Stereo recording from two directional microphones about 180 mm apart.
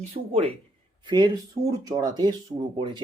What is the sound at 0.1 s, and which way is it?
Speech, 35° right (ahead or behind).